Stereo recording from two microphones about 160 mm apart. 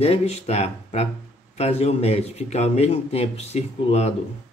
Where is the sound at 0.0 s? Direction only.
40° left (ahead or behind).